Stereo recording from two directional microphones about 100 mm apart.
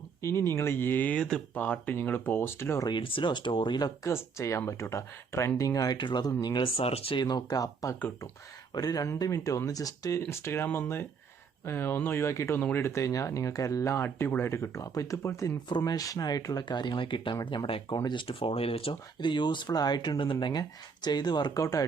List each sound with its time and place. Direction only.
0.2 s speech: 25° left (ahead or behind)
2.8 s speech: 55° left (ahead or behind)
3.8 s speech: 40° left (ahead or behind)
6.6 s speech: 85° left
7.2 s speech: 45° left (ahead or behind); by 17.9 s 60° left (ahead or behind)
17.9 s speech: 45° left (ahead or behind); by 18.9 s 75° left (ahead or behind)
19.2 s speech: 50° left (ahead or behind)
21.6 s speech: 35° left (ahead or behind)